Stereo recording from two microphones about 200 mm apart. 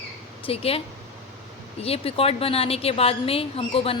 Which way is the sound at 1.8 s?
30° left (ahead or behind).